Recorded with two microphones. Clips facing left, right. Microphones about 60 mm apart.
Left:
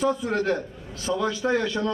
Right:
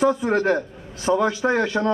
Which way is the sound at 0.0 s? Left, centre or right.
Right.